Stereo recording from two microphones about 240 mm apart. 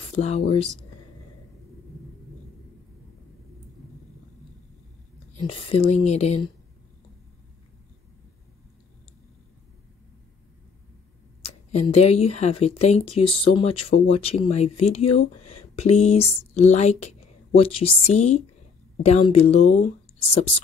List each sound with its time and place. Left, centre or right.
0.1 s speech: left
5.3 s speech: left
11.4 s speech: left